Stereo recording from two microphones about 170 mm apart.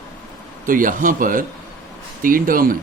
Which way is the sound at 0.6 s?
50° right (ahead or behind).